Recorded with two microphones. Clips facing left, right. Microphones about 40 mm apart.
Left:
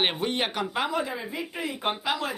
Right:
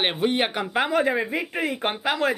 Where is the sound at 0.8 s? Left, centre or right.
Right.